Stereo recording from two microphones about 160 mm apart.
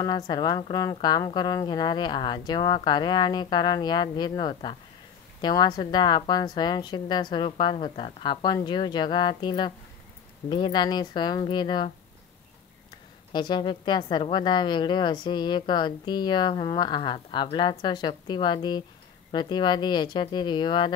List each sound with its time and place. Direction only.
0.0 s a woman's voice: 25° left (ahead or behind)
13.3 s a woman's voice: 30° left (ahead or behind)